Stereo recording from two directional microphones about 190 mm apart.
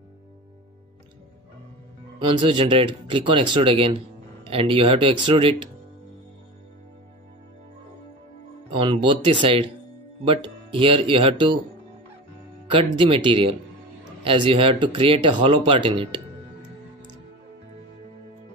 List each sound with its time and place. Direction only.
2.1 s speech: 25° right (ahead or behind)
8.6 s speech: 30° right (ahead or behind)
12.6 s speech: 25° right (ahead or behind)